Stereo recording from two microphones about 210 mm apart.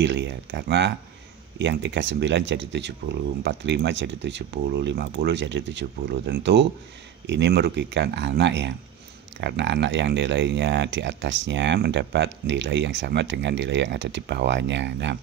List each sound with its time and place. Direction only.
0.0 s speech: 60° right (ahead or behind)